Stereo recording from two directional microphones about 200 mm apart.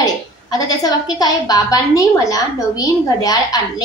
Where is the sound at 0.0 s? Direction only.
20° left (ahead or behind).